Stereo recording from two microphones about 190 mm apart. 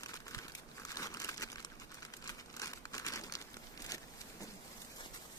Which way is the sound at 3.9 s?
20° left (ahead or behind).